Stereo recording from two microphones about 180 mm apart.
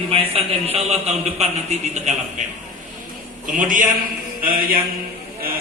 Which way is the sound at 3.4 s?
45° right (ahead or behind).